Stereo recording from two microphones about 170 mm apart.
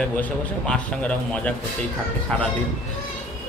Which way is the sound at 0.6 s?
5° left (ahead or behind).